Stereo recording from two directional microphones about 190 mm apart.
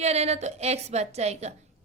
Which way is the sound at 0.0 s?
35° right (ahead or behind).